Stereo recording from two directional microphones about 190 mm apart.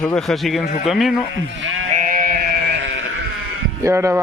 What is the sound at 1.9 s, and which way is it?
Sheep, 45° right (ahead or behind).